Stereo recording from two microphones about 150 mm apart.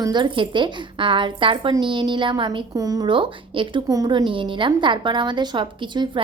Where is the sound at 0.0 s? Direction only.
30° right (ahead or behind).